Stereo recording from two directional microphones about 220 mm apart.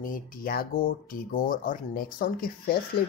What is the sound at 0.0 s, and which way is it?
Speech, 40° left (ahead or behind).